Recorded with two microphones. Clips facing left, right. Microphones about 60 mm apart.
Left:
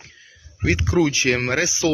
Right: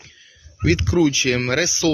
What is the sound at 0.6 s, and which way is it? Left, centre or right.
Speech, centre.